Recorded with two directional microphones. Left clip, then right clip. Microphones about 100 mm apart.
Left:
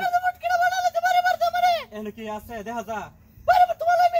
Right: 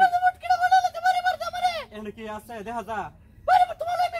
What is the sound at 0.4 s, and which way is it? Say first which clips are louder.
Bird: right 1 dB; 35° right (ahead or behind).